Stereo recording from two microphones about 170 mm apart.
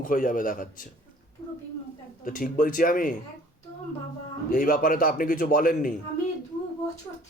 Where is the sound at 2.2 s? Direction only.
55° left (ahead or behind).